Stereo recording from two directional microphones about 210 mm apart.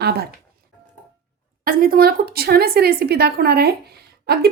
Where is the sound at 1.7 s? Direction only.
45° right (ahead or behind).